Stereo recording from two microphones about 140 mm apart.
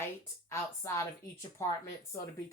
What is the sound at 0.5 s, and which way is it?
Speech, 20° left (ahead or behind).